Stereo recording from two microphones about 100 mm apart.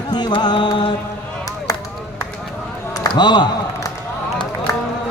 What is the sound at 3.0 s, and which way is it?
Speech, 50° left (ahead or behind).